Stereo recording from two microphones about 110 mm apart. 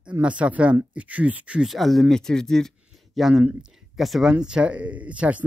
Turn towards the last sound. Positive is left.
turn(degrees=-15)  # may be behind; listen again after turning